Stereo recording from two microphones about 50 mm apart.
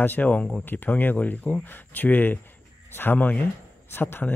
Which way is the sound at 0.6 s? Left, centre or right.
Left.